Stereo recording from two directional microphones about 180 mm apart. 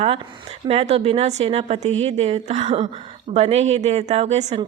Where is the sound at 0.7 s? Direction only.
35° right (ahead or behind).